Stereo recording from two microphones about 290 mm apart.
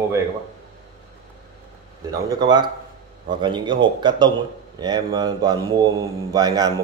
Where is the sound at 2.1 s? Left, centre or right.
Centre.